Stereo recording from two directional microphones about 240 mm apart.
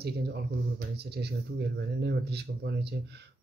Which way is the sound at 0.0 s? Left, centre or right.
Right.